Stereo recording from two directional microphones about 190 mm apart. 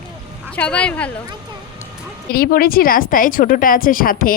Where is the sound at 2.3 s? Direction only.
50° left (ahead or behind).